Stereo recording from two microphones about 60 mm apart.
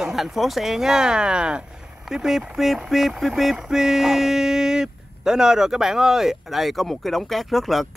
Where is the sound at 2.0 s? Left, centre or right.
Centre.